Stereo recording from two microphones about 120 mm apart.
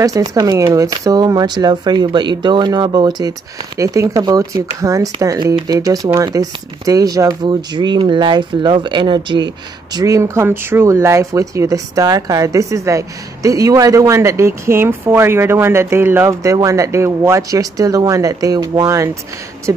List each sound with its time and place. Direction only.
0.0 s speech: 30° right (ahead or behind)
9.9 s speech: 25° right (ahead or behind)